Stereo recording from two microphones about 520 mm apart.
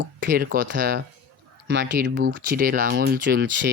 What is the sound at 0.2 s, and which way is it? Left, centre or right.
Speech, centre.